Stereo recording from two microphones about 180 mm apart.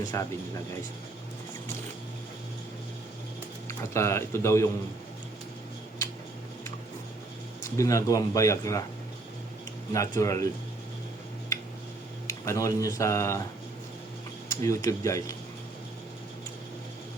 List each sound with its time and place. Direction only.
0.1 s speech: 15° left (ahead or behind)
3.9 s speech: 15° left (ahead or behind)
7.8 s speech: 15° left (ahead or behind)
9.9 s speech: 20° left (ahead or behind)
12.3 s speech: 15° left (ahead or behind)
14.6 s speech: 15° left (ahead or behind)